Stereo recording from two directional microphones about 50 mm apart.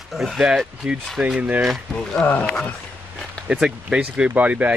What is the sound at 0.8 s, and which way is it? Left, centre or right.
Speech, right.